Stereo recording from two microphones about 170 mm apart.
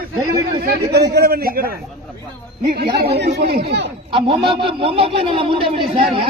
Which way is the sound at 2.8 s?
75° right (ahead or behind).